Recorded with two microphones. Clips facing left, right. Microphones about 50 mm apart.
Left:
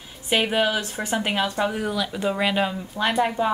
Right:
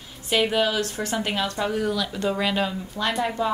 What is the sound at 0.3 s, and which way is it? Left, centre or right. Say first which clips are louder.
Speech: even; centre.